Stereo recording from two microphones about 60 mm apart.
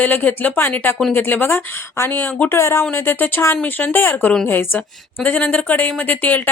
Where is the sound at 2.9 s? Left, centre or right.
Left.